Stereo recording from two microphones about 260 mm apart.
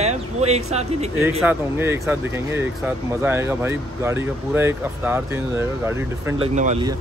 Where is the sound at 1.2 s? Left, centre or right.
Centre.